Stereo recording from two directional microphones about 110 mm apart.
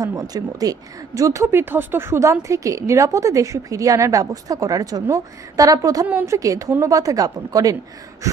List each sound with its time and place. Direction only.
0.0 s a woman's voice: 30° right (ahead or behind)